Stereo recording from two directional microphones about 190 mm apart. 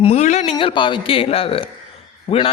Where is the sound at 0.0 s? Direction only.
35° left (ahead or behind).